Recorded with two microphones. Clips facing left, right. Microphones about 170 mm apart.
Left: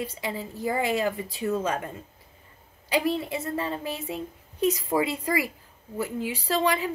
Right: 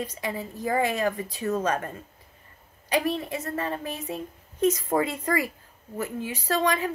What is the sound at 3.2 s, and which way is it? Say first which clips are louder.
Speech: left 1 dB; 15° left (ahead or behind).